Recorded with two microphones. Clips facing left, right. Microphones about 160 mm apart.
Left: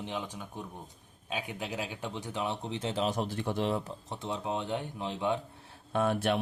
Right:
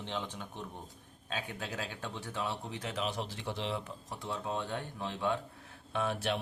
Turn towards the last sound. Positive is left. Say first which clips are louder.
# left 5 dB
turn(degrees=55)  # may be behind; listen again after turning